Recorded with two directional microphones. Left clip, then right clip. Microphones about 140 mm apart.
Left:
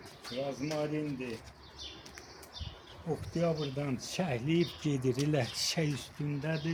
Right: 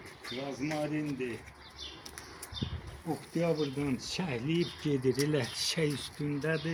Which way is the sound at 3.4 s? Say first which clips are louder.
Right 2 dB; 70° left (ahead or behind).